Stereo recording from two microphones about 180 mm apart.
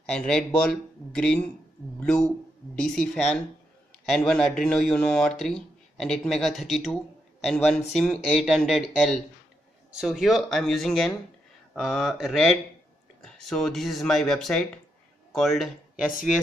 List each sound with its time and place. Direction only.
0.1 s a man's voice: 5° left (ahead or behind)